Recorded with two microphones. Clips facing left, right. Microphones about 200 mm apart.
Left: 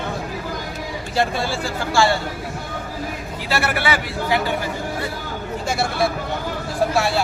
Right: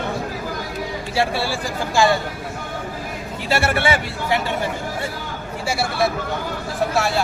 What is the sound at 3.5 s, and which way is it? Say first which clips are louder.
Speech: right 2 dB; 25° right (ahead or behind).